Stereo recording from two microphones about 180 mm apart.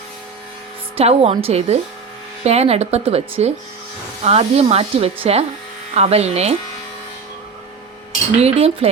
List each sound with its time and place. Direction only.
0.9 s speech: 35° right (ahead or behind)
8.4 s speech: 35° right (ahead or behind)